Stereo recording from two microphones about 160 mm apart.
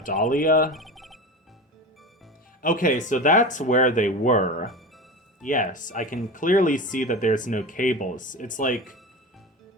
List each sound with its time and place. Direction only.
0.0 s speech: 60° left (ahead or behind)
0.7 s a sound: centre (ahead or behind)
2.6 s speech: 55° left (ahead or behind)